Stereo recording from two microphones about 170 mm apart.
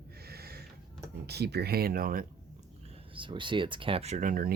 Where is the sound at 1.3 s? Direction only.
75° right (ahead or behind).